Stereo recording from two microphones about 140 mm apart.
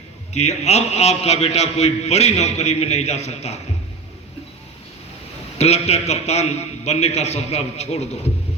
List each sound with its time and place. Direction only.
0.3 s a man's voice: 50° left (ahead or behind)
5.5 s a man's voice: 50° left (ahead or behind)